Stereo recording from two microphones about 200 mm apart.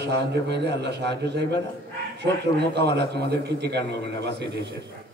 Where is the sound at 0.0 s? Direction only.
55° right (ahead or behind).